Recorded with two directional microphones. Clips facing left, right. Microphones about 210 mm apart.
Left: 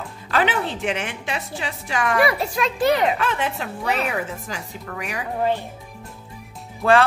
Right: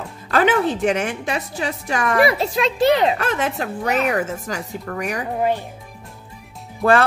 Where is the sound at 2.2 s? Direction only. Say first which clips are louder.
Right 3 dB; 25° right (ahead or behind).